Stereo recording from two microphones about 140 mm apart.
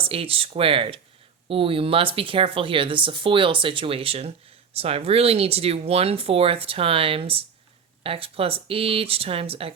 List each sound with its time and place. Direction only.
0.0 s speech: 40° right (ahead or behind)